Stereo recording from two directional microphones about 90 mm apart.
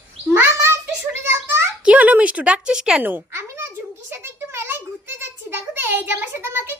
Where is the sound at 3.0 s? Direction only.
25° right (ahead or behind).